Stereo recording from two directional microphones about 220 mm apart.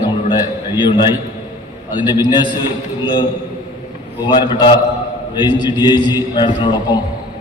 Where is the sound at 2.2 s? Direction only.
20° left (ahead or behind).